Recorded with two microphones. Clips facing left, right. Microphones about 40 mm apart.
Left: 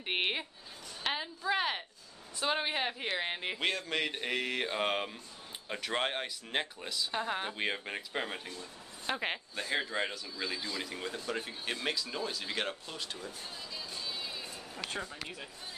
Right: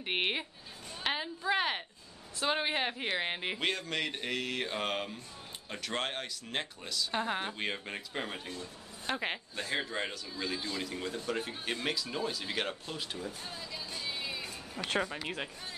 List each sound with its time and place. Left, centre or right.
0.0 s a man's voice: centre
7.1 s speech: centre
7.5 s a man's voice: centre
13.8 s music: right
14.9 s speech: right